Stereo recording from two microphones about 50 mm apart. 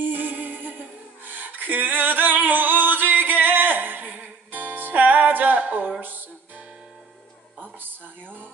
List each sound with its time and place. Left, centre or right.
0.0 s music: right
1.2 s singing: right